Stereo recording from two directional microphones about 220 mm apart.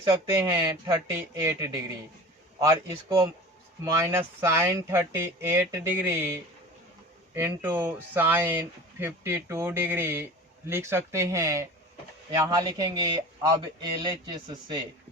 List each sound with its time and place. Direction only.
0.0 s speech: 15° right (ahead or behind)
3.8 s speech: 15° right (ahead or behind)
7.3 s speech: 10° right (ahead or behind)